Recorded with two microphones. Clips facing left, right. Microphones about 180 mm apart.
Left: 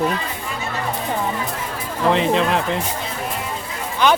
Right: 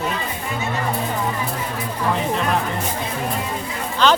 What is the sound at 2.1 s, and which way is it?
Speech, 90° left.